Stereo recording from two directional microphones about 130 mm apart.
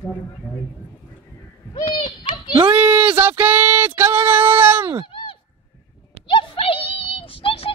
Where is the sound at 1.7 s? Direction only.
35° left (ahead or behind).